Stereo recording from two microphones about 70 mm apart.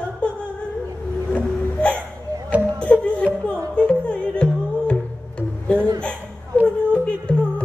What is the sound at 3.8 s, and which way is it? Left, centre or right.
Music, centre.